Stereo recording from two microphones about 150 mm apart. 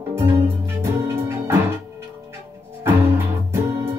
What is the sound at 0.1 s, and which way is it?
Music, 15° right (ahead or behind).